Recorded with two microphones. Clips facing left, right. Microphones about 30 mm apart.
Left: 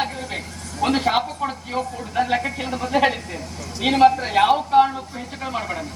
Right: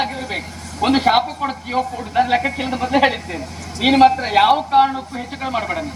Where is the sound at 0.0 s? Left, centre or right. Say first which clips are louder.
Right 4 dB; right.